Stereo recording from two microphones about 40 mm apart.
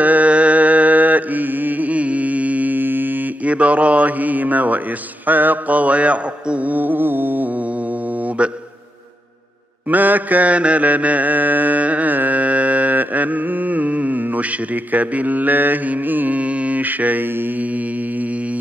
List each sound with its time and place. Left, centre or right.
0.0 s mantra: right
3.4 s a man's voice: right
8.4 s a sound: right
9.8 s mantra: right
16.3 s mantra: right